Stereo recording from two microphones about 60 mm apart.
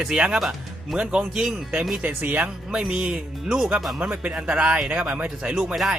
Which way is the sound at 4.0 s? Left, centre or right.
Right.